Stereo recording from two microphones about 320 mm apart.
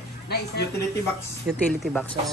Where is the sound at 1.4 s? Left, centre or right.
Centre.